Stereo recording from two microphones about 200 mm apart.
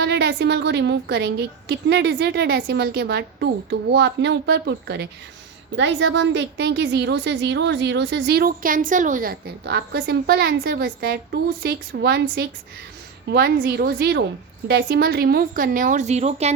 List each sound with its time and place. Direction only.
0.0 s a woman's voice: 60° right (ahead or behind); by 16.5 s 35° right (ahead or behind)